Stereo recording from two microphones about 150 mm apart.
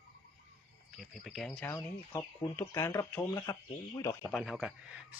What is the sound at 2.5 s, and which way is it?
Speech, 20° left (ahead or behind).